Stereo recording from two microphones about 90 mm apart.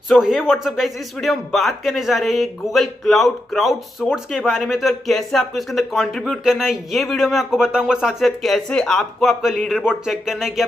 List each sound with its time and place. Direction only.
0.1 s speech: 5° right (ahead or behind)